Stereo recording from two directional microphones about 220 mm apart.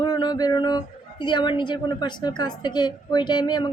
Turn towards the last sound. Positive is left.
turn(degrees=20)  # may be behind; listen again after turning